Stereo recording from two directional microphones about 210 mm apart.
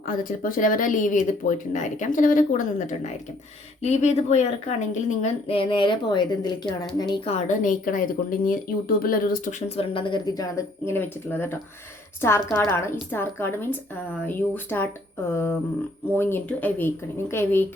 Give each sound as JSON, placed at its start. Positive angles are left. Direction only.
{"t": 0.1, "sound": "speech", "side_deg": 40}